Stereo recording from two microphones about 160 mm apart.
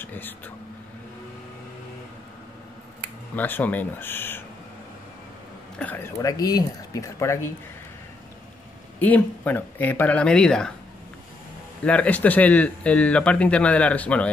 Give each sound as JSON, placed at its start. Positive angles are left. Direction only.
{"t": 0.0, "sound": "vehicle", "side_deg": 10}
{"t": 3.3, "sound": "speech", "side_deg": 10}
{"t": 5.8, "sound": "speech", "side_deg": 10}
{"t": 6.1, "sound": "speech", "side_deg": 25}
{"t": 9.0, "sound": "speech", "side_deg": 10}
{"t": 11.8, "sound": "speech", "side_deg": 10}